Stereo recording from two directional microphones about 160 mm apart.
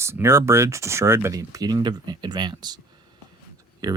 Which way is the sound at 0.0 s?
15° right (ahead or behind).